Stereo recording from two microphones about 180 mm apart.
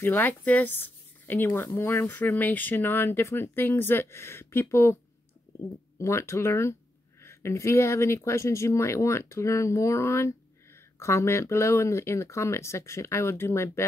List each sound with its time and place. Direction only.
0.0 s speech: 10° left (ahead or behind)
5.9 s speech: 15° left (ahead or behind)